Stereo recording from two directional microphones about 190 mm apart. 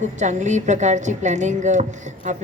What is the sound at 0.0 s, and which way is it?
A woman's voice, 40° right (ahead or behind).